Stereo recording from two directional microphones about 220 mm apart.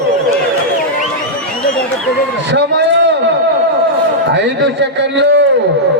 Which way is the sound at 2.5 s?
50° right (ahead or behind).